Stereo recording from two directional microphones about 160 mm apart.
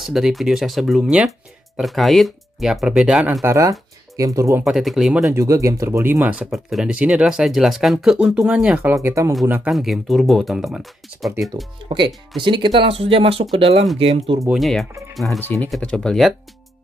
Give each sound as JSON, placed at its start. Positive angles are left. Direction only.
{"t": 0.0, "sound": "speech", "side_deg": 0}
{"t": 4.6, "sound": "speech", "side_deg": 0}
{"t": 5.3, "sound": "speech", "side_deg": -20}
{"t": 8.9, "sound": "speech", "side_deg": -20}
{"t": 9.7, "sound": "speech", "side_deg": 0}
{"t": 12.4, "sound": "speech", "side_deg": -30}
{"t": 14.5, "sound": "speech", "side_deg": 0}